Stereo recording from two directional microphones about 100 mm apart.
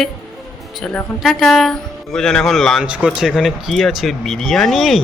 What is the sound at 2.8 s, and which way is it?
A man's voice, 10° right (ahead or behind).